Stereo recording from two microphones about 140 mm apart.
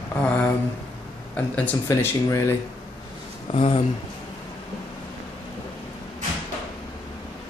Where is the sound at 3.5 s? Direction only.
40° left (ahead or behind).